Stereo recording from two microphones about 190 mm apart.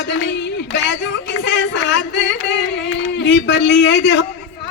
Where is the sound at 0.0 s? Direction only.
70° left (ahead or behind).